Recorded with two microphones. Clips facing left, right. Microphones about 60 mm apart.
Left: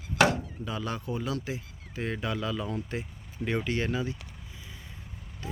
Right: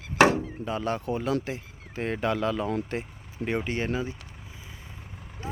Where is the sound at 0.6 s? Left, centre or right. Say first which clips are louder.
Right 4 dB; right.